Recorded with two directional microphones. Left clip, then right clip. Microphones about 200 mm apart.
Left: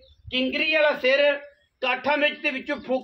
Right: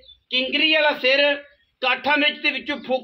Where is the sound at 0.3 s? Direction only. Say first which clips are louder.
Right 4 dB; 40° right (ahead or behind).